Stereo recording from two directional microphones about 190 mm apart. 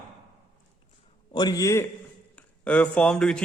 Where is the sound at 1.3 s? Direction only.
20° left (ahead or behind).